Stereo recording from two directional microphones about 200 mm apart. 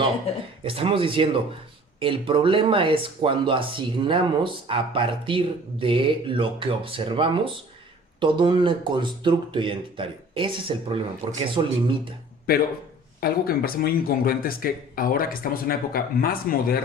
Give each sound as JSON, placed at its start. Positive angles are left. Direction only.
{"t": 0.6, "sound": "speech", "side_deg": -25}
{"t": 13.1, "sound": "speech", "side_deg": 50}